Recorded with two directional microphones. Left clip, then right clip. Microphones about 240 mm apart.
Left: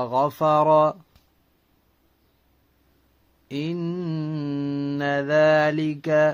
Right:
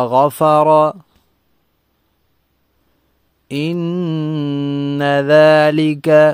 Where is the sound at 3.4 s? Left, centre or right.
Right.